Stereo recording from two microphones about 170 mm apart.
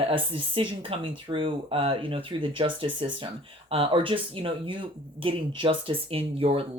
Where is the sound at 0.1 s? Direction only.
30° right (ahead or behind).